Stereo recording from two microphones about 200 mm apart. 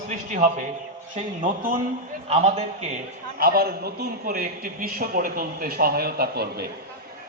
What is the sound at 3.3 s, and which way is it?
A man's voice, 50° right (ahead or behind).